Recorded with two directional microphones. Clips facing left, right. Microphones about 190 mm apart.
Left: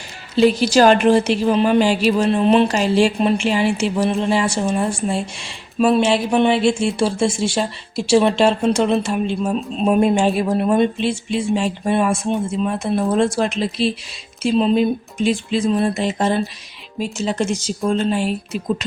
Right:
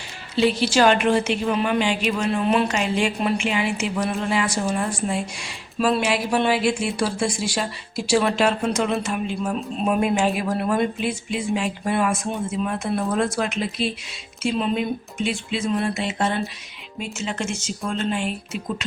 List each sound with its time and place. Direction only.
0.3 s a woman's voice: 40° left (ahead or behind)